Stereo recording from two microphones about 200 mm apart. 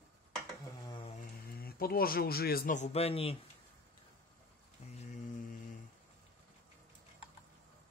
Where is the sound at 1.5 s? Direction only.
50° left (ahead or behind); by 3.3 s 30° left (ahead or behind).